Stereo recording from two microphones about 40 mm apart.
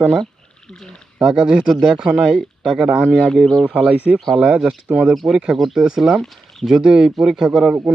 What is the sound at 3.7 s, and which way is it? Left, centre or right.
Speech, right.